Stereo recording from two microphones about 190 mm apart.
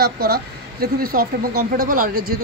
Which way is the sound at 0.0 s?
55° right (ahead or behind).